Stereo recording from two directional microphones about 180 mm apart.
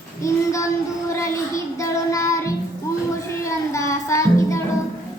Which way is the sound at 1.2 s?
15° left (ahead or behind).